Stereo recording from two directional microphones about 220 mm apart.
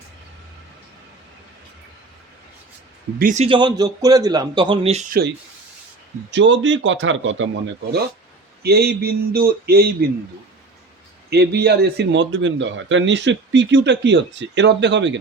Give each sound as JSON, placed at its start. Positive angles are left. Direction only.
{"t": 3.2, "sound": "a man's voice", "side_deg": -35}
{"t": 6.3, "sound": "speech", "side_deg": -55}
{"t": 8.6, "sound": "a man's voice", "side_deg": -45}
{"t": 11.3, "sound": "a man's voice", "side_deg": -50}